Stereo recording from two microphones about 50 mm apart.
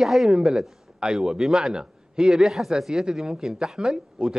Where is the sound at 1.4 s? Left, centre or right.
Centre.